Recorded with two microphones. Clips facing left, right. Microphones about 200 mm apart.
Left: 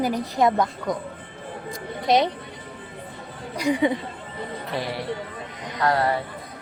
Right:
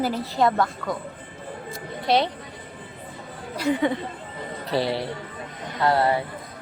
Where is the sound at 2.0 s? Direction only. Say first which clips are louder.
Left 2 dB; 20° left (ahead or behind).